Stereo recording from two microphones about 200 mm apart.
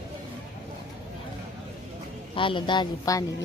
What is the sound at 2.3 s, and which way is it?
Speech, 25° left (ahead or behind).